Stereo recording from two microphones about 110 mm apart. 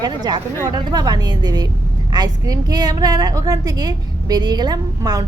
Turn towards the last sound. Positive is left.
turn(degrees=-40)  # may be behind; listen again after turning